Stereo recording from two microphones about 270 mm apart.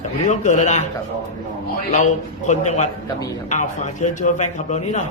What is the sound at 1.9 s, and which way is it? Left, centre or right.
A man's voice, left.